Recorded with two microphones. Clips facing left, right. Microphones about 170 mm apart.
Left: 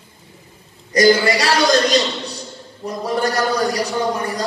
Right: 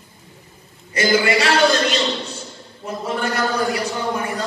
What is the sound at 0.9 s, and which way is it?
A man's voice, 35° left (ahead or behind).